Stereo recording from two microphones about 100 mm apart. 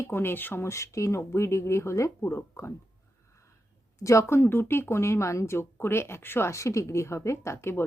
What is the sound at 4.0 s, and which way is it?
Speech, 30° left (ahead or behind).